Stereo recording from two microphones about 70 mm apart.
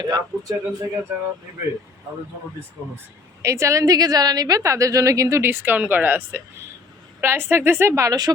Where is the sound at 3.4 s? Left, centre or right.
Right.